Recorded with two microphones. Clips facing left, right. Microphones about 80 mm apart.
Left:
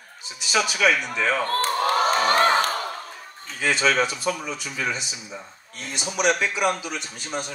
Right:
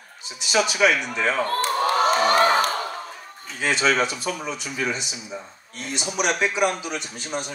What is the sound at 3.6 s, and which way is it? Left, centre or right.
Speech, right.